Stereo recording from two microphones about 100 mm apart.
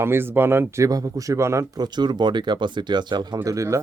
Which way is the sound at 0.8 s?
35° right (ahead or behind).